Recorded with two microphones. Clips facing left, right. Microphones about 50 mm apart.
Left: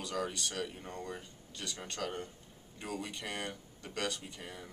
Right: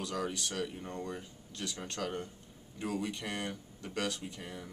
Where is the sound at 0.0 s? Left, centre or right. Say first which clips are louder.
Right 1 dB; centre.